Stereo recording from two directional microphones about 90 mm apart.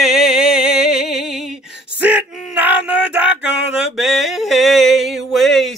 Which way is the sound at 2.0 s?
15° right (ahead or behind).